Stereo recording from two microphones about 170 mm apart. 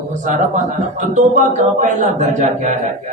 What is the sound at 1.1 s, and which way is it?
A man's voice, 45° right (ahead or behind).